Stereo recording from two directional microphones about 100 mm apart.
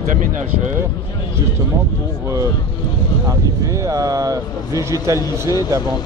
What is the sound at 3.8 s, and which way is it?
Speech, 35° right (ahead or behind).